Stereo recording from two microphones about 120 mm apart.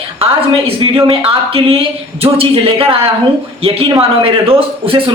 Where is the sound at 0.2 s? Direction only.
50° right (ahead or behind).